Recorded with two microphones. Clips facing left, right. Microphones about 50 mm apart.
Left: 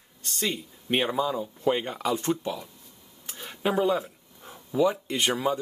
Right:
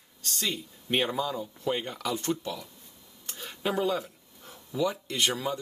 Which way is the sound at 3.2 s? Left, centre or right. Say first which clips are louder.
Left 3 dB; centre.